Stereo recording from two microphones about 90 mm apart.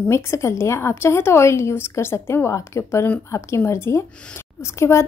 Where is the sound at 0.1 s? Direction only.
30° left (ahead or behind).